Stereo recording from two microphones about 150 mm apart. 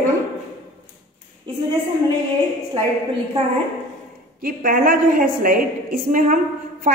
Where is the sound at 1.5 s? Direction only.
30° right (ahead or behind).